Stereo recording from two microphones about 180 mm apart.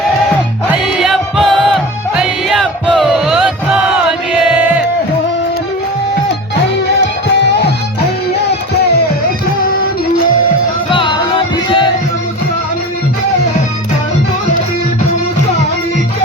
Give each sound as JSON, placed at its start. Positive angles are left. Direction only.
{"t": 0.9, "sound": "music", "side_deg": 0}
{"t": 10.9, "sound": "music", "side_deg": 30}